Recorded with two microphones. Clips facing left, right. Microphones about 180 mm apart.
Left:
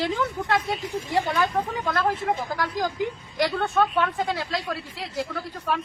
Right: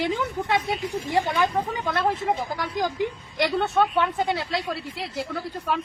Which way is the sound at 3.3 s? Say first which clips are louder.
Right 1 dB; 20° right (ahead or behind).